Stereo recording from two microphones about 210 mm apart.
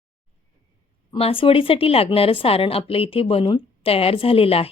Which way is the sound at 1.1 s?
25° left (ahead or behind).